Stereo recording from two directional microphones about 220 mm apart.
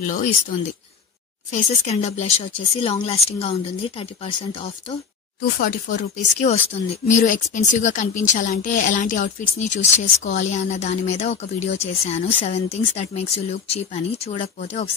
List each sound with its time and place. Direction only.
0.0 s speech: 35° left (ahead or behind)
1.5 s speech: 30° left (ahead or behind)
5.6 s speech: 40° left (ahead or behind)